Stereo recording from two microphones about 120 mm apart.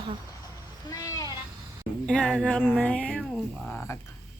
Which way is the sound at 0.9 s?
30° left (ahead or behind).